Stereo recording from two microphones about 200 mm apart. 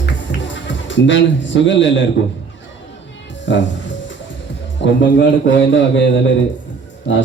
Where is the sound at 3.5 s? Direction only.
65° left (ahead or behind).